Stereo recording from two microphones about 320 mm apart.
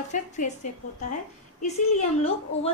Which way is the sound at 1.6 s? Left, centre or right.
Centre.